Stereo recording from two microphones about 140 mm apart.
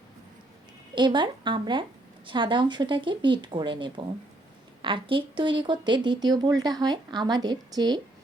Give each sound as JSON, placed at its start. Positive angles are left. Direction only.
{"t": 0.9, "sound": "speech", "side_deg": -35}